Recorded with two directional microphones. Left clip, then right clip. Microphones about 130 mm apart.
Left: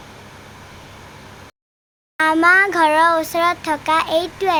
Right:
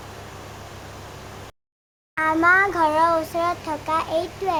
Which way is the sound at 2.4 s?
90° left.